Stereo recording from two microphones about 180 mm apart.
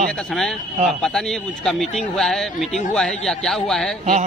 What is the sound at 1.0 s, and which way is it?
A man's voice, 5° left (ahead or behind).